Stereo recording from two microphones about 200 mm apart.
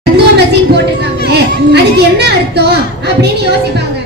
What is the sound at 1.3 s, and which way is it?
A woman's voice, 55° right (ahead or behind).